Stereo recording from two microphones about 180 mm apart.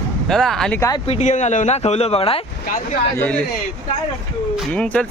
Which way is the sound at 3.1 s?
10° left (ahead or behind).